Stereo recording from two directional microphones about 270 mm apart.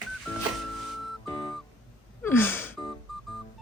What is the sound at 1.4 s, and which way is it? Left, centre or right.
Music, centre.